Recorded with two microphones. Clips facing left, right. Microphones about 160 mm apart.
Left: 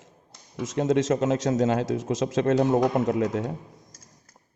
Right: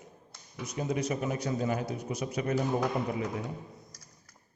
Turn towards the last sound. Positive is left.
turn(degrees=80)